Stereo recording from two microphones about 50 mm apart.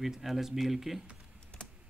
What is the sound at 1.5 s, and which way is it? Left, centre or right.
Typing, centre.